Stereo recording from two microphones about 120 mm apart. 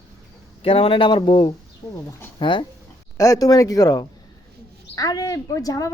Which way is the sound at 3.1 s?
30° left (ahead or behind).